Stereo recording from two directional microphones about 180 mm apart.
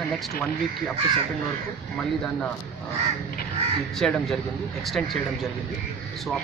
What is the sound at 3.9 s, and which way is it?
Speech, 5° left (ahead or behind).